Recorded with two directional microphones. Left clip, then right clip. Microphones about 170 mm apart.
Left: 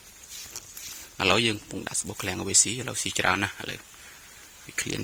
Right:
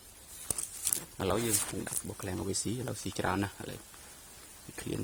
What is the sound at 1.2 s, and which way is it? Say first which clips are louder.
Speech: left 10 dB; 25° left (ahead or behind).